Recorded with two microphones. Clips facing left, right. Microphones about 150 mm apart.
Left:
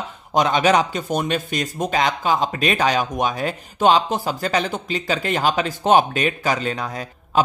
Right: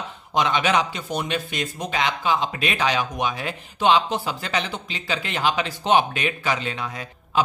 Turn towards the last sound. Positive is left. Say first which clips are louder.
# left 3 dB
turn(degrees=40)  # may be behind; listen again after turning